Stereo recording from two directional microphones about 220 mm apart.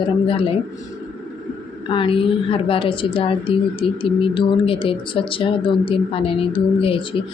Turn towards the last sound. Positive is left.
turn(degrees=25)  # may be behind; listen again after turning